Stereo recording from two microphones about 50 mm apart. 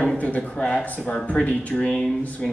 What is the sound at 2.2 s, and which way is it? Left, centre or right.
Speech, left.